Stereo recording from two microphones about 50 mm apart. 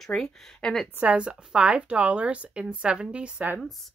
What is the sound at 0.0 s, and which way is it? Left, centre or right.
Speech, centre.